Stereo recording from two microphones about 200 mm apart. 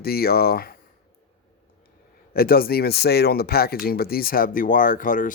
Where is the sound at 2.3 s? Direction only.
50° left (ahead or behind).